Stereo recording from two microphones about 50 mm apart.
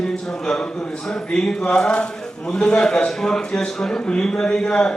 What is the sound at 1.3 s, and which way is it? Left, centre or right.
A man's voice, centre.